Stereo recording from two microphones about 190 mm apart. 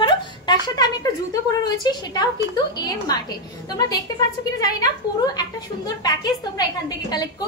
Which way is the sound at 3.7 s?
20° left (ahead or behind).